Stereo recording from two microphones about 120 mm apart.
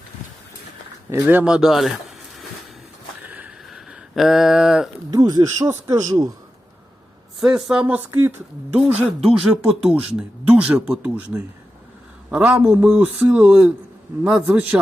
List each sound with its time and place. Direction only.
1.1 s speech: 15° right (ahead or behind)
1.5 s speech: centre (ahead or behind)
3.2 s a sound: 15° right (ahead or behind)
3.7 s a sound: centre (ahead or behind)
5.1 s speech: 30° right (ahead or behind)
7.3 s speech: 5° right (ahead or behind)
9.2 s speech: 5° right (ahead or behind)
12.3 s speech: 10° right (ahead or behind)